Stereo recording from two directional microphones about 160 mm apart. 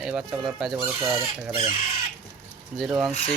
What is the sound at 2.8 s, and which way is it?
Speech, 5° right (ahead or behind).